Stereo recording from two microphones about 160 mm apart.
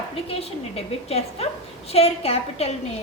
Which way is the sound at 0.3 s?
40° left (ahead or behind).